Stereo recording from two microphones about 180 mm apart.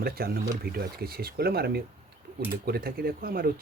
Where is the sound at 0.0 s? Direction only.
55° right (ahead or behind).